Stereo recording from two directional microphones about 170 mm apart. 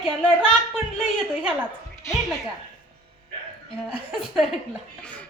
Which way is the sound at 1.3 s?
5° right (ahead or behind).